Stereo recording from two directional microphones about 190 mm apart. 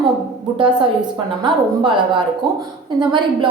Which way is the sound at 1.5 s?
25° right (ahead or behind).